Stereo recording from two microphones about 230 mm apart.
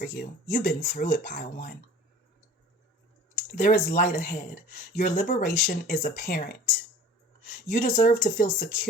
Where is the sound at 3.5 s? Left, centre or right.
Left.